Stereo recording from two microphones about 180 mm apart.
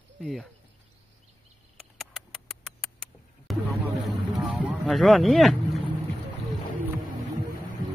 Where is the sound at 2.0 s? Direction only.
Centre (ahead or behind).